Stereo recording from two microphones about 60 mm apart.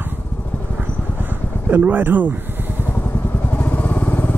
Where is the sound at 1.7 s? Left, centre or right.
Right.